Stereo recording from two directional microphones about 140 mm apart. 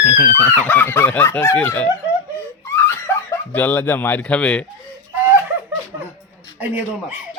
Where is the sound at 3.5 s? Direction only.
10° left (ahead or behind).